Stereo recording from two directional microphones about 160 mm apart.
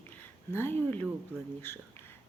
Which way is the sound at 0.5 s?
15° left (ahead or behind).